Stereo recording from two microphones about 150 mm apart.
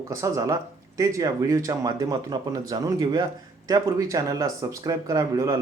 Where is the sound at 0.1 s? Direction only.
20° right (ahead or behind).